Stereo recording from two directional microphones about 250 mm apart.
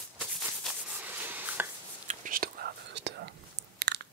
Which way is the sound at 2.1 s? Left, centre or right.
Right.